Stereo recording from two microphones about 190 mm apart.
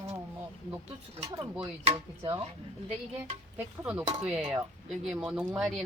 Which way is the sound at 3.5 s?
10° right (ahead or behind).